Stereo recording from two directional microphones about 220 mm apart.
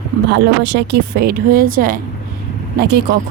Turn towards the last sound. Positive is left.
turn(degrees=-45)  # may be behind; listen again after turning